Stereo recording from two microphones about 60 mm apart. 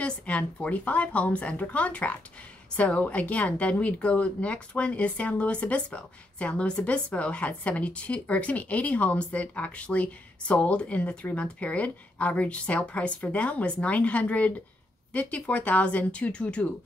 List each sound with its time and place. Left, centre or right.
0.0 s a woman's voice: left